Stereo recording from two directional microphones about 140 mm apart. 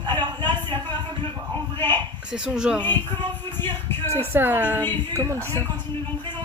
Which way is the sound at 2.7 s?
15° left (ahead or behind).